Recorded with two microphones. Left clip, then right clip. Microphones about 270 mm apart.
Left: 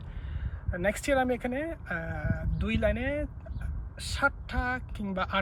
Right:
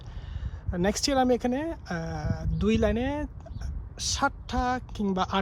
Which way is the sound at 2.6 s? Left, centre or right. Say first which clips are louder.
Right 4 dB; centre.